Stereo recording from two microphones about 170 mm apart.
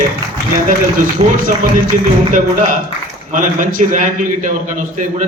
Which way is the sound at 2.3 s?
50° right (ahead or behind).